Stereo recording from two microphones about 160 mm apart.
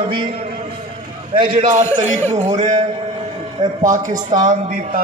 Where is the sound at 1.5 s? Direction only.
45° right (ahead or behind).